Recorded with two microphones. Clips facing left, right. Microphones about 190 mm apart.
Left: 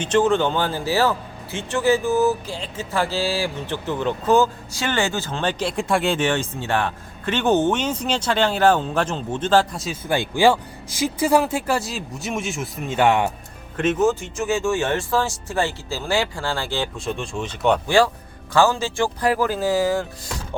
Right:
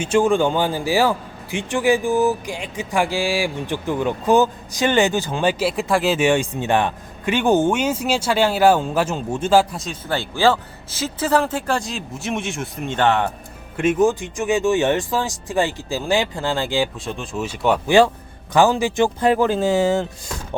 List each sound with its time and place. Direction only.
0.0 s a man's voice: 10° right (ahead or behind)
9.8 s speech: 10° left (ahead or behind)
13.7 s a man's voice: 15° right (ahead or behind)
17.1 s speech: centre (ahead or behind)
17.8 s speech: 20° right (ahead or behind)